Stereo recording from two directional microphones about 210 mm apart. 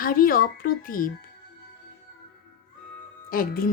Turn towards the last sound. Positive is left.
turn(degrees=45)  # may be behind; listen again after turning